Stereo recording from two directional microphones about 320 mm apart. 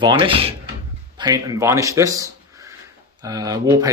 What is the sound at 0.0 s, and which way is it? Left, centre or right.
A man's voice, centre.